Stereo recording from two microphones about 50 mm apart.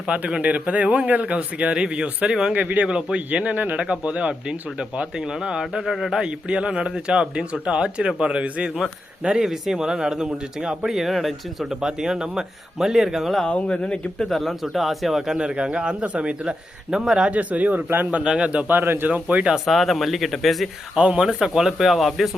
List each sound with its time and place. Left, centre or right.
0.1 s speech: right
2.6 s speech: right
2.8 s speech: centre
10.9 s speech: centre
13.5 s speech: left
14.3 s speech: centre
15.4 s speech: centre
17.3 s speech: right
18.3 s speech: right
18.7 s a man's voice: right
19.0 s speech: right
19.5 s speech: centre
20.9 s speech: centre